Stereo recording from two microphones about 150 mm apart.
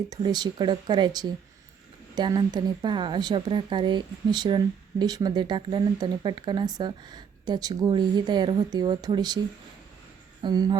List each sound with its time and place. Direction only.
0.1 s speech: 25° right (ahead or behind)
10.4 s speech: 30° right (ahead or behind)